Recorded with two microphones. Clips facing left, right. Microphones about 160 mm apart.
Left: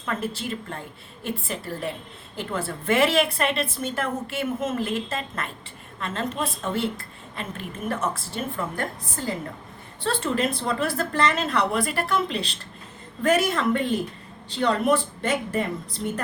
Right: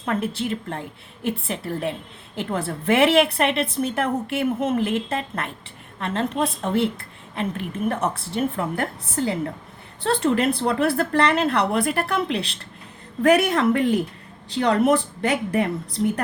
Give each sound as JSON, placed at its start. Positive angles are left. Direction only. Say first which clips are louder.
{"t": 0.1, "sound": "a woman's voice", "louder": "right 4 dB", "side_deg": -65}